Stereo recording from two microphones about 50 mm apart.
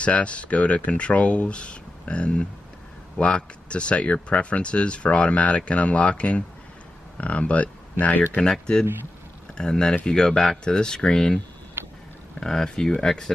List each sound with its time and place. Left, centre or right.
0.0 s speech: left
8.4 s speech: centre
11.8 s vehicle: right
12.4 s speech: centre